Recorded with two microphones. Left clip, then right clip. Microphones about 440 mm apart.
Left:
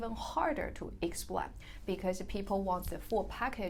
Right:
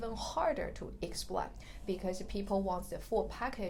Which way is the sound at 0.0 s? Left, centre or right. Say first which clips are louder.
Even; centre.